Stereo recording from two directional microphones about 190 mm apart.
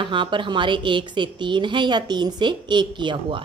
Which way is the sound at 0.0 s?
25° right (ahead or behind).